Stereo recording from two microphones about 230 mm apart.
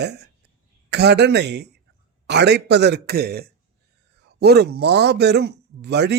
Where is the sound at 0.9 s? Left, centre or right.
Right.